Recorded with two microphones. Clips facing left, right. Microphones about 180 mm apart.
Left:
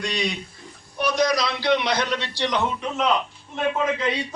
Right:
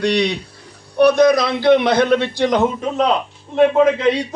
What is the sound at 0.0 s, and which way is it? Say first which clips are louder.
A man's voice: right 10 dB; 70° right (ahead or behind).